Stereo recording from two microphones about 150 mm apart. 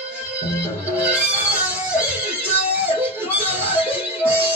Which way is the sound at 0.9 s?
10° right (ahead or behind).